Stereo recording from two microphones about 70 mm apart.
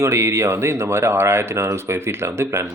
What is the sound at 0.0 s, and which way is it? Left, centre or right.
Speech, right.